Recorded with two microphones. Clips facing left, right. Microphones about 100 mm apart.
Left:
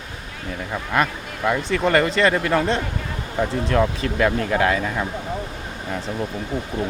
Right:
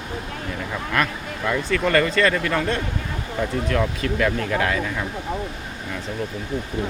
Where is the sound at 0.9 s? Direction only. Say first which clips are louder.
Left 3 dB; 20° left (ahead or behind).